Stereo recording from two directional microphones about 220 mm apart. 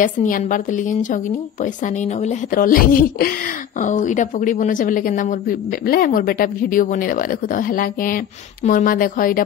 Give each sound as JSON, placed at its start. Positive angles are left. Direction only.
{"t": 0.0, "sound": "speech", "side_deg": 35}